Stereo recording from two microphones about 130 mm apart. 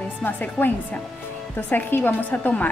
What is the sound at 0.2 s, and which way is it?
A woman's voice, 15° left (ahead or behind).